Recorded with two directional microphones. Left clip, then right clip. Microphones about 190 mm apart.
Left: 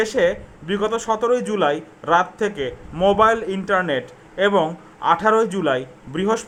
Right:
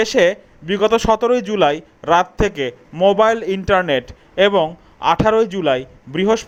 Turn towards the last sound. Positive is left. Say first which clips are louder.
# right 4 dB
turn(degrees=-25)  # may be behind; listen again after turning